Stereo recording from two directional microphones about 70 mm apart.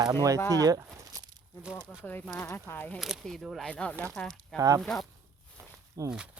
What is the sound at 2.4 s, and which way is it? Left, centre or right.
Speech, left.